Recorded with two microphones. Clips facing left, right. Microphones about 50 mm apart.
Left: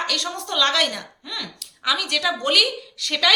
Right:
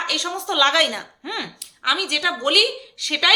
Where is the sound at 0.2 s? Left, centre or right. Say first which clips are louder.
Right 3 dB; centre.